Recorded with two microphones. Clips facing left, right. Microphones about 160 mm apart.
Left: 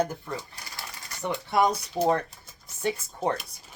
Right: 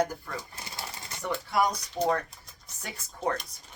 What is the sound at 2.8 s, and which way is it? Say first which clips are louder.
Speech: left 7 dB; 25° left (ahead or behind).